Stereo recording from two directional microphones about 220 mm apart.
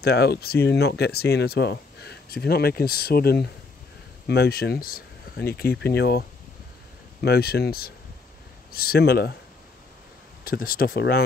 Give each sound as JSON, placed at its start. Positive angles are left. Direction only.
{"t": 0.0, "sound": "speech", "side_deg": 45}
{"t": 7.2, "sound": "speech", "side_deg": 45}
{"t": 10.4, "sound": "speech", "side_deg": 40}